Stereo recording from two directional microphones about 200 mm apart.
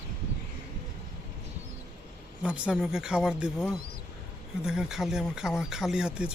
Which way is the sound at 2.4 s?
5° right (ahead or behind).